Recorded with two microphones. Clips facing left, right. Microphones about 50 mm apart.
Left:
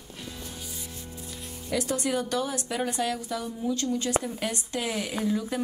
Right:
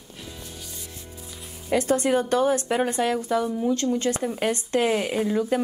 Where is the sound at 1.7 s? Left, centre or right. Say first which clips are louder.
Right 7 dB; right.